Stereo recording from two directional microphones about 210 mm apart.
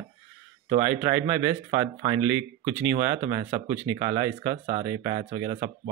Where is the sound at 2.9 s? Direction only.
25° right (ahead or behind).